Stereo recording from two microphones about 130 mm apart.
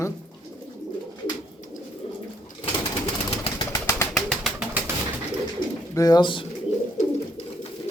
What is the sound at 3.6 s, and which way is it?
Bird, 25° left (ahead or behind).